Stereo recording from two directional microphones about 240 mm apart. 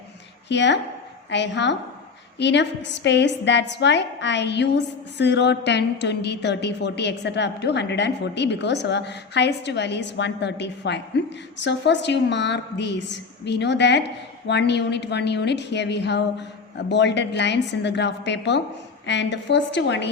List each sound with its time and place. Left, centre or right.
0.4 s a woman's voice: left